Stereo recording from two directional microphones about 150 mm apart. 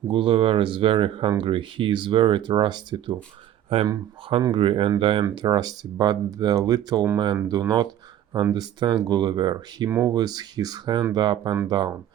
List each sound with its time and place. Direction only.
0.1 s speech: 35° right (ahead or behind)
9.9 s speech: 15° right (ahead or behind)
10.2 s speech: 25° right (ahead or behind)